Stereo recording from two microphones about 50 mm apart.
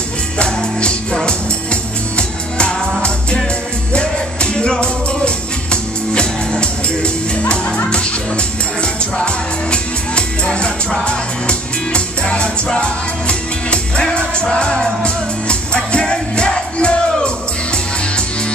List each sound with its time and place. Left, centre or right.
0.4 s music: centre